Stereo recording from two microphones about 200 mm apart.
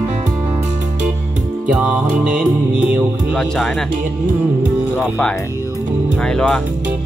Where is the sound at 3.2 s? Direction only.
5° left (ahead or behind).